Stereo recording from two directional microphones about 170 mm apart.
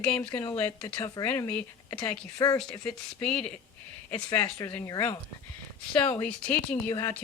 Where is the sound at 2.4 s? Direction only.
20° left (ahead or behind).